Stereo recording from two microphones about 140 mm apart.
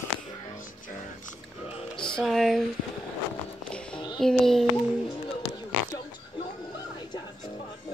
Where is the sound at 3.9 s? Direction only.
30° left (ahead or behind).